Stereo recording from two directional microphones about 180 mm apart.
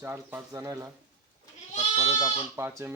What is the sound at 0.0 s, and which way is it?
Speech, 10° right (ahead or behind).